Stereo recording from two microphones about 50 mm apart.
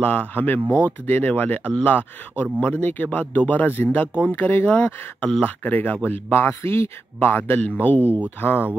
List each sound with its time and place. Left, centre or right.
0.0 s a man's voice: left
4.6 s speech: left
6.3 s speech: left
7.2 s a man's voice: left